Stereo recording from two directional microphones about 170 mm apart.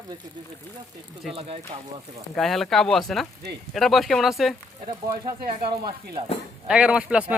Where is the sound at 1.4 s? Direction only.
35° right (ahead or behind).